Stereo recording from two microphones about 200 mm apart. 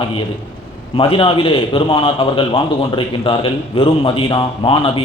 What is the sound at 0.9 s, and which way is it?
A man's voice, 25° left (ahead or behind).